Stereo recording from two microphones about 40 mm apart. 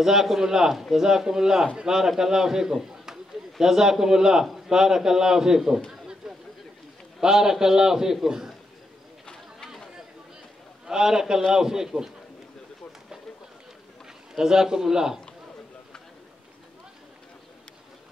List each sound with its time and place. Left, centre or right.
0.0 s a man's voice: centre
6.2 s a sound: centre
7.2 s a man's voice: centre
9.2 s a sound: centre
10.9 s a man's voice: centre
14.3 s a man's voice: centre